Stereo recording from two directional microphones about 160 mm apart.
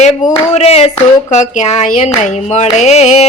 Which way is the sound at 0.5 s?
40° left (ahead or behind).